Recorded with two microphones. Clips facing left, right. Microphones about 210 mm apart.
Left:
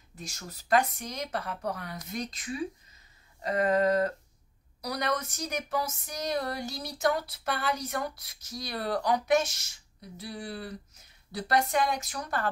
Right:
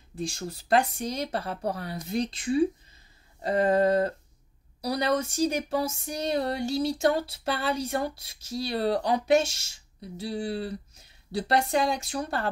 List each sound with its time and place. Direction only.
0.1 s speech: 30° right (ahead or behind)